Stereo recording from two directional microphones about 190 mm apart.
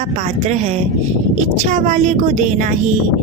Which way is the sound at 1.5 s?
40° right (ahead or behind).